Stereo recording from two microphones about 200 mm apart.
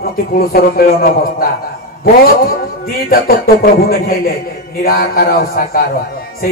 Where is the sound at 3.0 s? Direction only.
50° left (ahead or behind).